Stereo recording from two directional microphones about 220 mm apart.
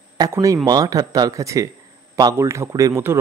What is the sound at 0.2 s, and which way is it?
Speech, 15° right (ahead or behind).